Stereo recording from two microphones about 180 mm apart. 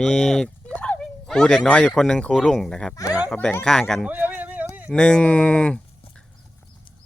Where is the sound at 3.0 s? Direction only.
20° left (ahead or behind).